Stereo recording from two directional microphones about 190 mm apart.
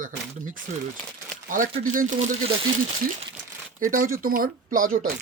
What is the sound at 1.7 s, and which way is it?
Speech, 40° right (ahead or behind).